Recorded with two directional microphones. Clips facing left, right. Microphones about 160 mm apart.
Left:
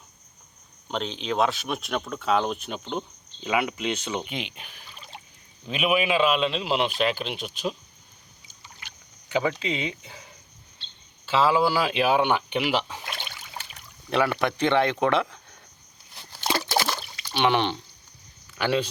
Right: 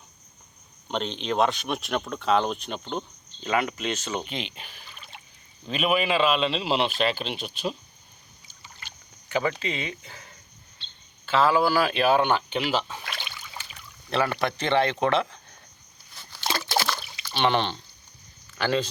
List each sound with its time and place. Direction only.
0.9 s speech: centre (ahead or behind)
4.9 s drip: 35° left (ahead or behind)
5.6 s speech: 5° left (ahead or behind)
9.3 s speech: 15° left (ahead or behind)
11.5 s speech: 15° left (ahead or behind)
13.1 s trickle: 50° left (ahead or behind)
14.1 s speech: 15° left (ahead or behind)
16.7 s a sound: 15° left (ahead or behind)
18.5 s a man's voice: 10° left (ahead or behind)